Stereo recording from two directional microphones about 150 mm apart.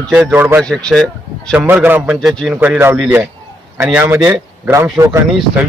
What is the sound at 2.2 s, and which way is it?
Speech, 5° left (ahead or behind).